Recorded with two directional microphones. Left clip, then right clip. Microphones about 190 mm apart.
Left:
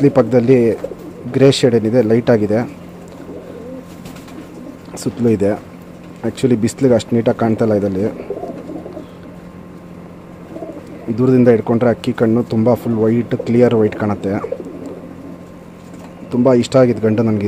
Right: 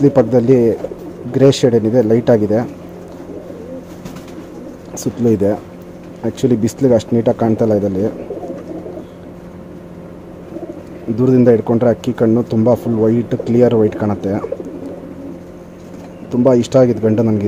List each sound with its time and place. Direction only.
0.3 s speech: centre (ahead or behind)
4.9 s speech: centre (ahead or behind)
11.1 s speech: centre (ahead or behind)
16.3 s speech: centre (ahead or behind)